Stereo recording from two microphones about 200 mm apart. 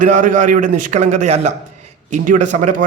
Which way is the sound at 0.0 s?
40° right (ahead or behind).